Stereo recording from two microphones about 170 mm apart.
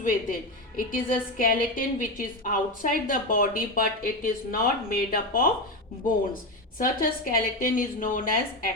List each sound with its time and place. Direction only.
0.0 s a woman's voice: 55° left (ahead or behind)